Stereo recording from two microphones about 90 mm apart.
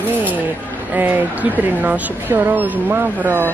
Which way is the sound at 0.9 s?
20° right (ahead or behind).